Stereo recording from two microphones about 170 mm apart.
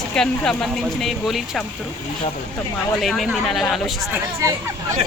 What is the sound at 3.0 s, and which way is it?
Speech, centre (ahead or behind).